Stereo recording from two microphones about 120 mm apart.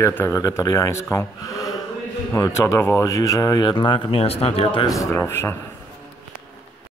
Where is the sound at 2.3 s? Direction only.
25° left (ahead or behind); by 4.8 s 50° left (ahead or behind).